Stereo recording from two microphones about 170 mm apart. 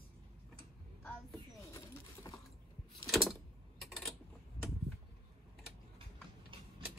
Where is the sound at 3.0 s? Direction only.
Centre (ahead or behind).